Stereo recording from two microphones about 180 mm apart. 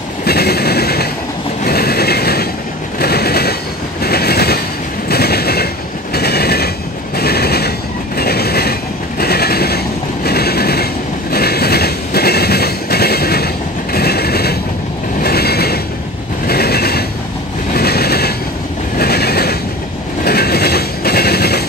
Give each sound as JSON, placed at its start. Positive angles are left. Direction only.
{"t": 0.2, "sound": "a sound", "side_deg": 60}
{"t": 1.7, "sound": "mechanisms", "side_deg": 60}
{"t": 3.0, "sound": "a sound", "side_deg": 60}
{"t": 4.0, "sound": "train", "side_deg": 60}
{"t": 7.2, "sound": "mechanisms", "side_deg": 60}
{"t": 8.2, "sound": "train", "side_deg": 60}
{"t": 10.2, "sound": "mechanisms", "side_deg": 60}
{"t": 11.3, "sound": "train", "side_deg": 60}
{"t": 13.9, "sound": "mechanisms", "side_deg": 60}
{"t": 15.2, "sound": "train", "side_deg": 60}
{"t": 16.4, "sound": "a sound", "side_deg": 60}